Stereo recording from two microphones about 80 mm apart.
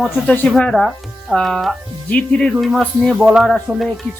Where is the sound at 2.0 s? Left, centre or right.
Centre.